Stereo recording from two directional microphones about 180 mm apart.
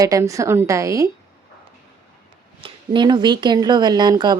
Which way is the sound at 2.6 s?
25° right (ahead or behind).